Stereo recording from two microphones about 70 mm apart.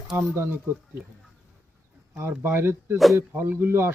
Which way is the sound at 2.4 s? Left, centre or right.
Right.